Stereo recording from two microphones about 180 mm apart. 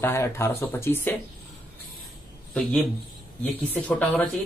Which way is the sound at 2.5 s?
5° left (ahead or behind).